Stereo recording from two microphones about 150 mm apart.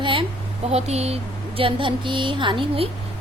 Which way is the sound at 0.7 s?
45° right (ahead or behind).